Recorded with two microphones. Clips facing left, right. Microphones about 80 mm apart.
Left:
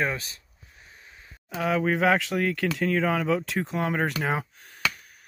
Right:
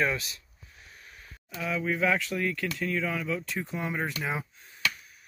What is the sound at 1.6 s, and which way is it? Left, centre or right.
Speech, left.